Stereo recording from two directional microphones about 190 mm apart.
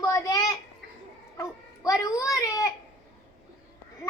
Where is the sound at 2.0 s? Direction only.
20° left (ahead or behind).